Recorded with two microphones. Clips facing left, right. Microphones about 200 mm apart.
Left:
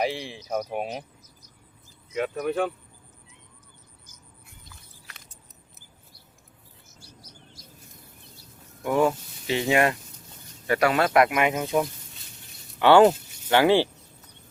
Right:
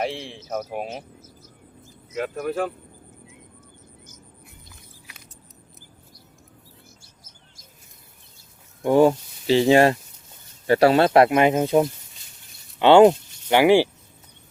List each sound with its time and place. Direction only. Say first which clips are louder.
0.0 s speech: even; centre (ahead or behind)
2.1 s speech: even; centre (ahead or behind)
7.0 s chirp: left 5 dB; 45° right (ahead or behind)
8.8 s speech: right 6 dB; 30° right (ahead or behind)
12.8 s speech: right 3 dB; 20° right (ahead or behind)